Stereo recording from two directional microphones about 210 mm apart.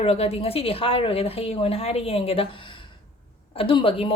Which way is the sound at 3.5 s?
25° left (ahead or behind).